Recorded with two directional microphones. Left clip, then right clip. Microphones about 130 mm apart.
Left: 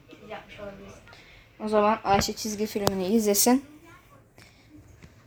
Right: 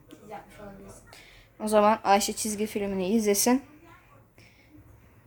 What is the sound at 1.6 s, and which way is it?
Speech, 65° right (ahead or behind).